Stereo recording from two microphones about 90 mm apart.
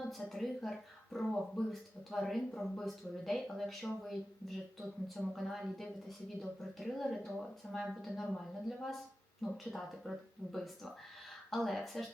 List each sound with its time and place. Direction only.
0.1 s speech: centre (ahead or behind)
9.4 s speech: centre (ahead or behind)